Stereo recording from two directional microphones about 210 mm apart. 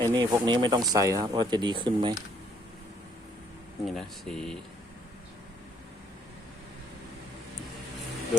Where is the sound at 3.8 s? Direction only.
Centre (ahead or behind).